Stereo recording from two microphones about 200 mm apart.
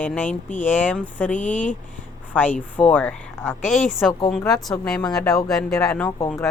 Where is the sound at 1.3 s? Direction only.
40° left (ahead or behind).